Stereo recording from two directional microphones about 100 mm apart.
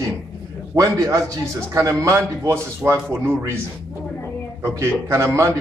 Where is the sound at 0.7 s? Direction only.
35° right (ahead or behind).